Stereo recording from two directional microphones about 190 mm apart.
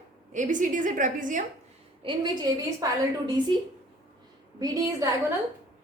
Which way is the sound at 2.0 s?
25° right (ahead or behind).